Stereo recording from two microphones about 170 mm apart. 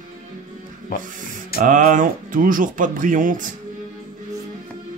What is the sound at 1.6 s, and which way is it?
Speech, 50° right (ahead or behind).